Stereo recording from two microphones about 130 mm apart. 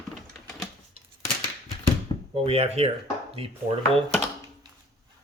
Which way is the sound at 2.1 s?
40° left (ahead or behind).